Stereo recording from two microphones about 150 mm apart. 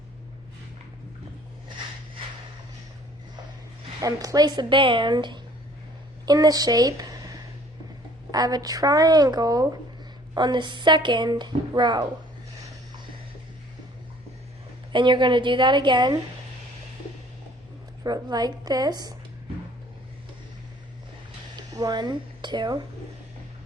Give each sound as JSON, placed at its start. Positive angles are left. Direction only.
{"t": 4.0, "sound": "a woman's voice", "side_deg": -25}
{"t": 14.9, "sound": "a woman's voice", "side_deg": -30}
{"t": 18.0, "sound": "a woman's voice", "side_deg": -25}
{"t": 21.5, "sound": "speech", "side_deg": -25}